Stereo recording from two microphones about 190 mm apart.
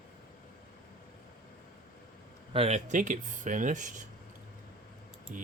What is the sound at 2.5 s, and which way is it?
Speech, 35° right (ahead or behind).